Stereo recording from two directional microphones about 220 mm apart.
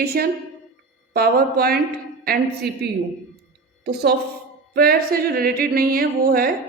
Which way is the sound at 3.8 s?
50° right (ahead or behind).